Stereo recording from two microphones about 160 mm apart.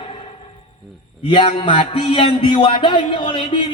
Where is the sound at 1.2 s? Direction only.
30° left (ahead or behind).